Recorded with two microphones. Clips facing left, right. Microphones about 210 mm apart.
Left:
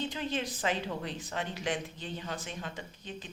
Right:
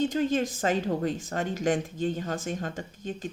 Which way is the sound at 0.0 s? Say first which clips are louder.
Right 9 dB; 45° right (ahead or behind).